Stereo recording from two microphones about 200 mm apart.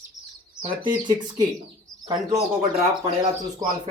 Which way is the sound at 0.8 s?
25° right (ahead or behind).